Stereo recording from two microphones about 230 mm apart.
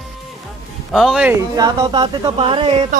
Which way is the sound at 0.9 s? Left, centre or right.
Centre.